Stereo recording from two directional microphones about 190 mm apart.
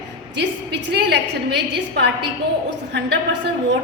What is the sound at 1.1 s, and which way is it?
A woman's voice, 60° right (ahead or behind).